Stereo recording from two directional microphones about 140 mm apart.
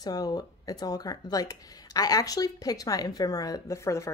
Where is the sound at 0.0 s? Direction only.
25° left (ahead or behind).